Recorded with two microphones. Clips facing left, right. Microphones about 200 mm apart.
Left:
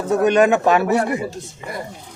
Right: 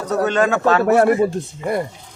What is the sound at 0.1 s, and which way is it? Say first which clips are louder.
Speech: left 3 dB; 15° left (ahead or behind).